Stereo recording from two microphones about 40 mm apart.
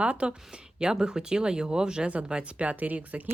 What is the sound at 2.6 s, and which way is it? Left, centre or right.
Speech, right.